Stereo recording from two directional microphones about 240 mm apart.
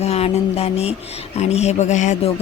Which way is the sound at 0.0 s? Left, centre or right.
Left.